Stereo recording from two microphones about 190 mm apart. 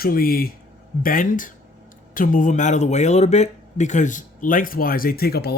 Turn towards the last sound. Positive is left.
turn(degrees=55)  # may be behind; listen again after turning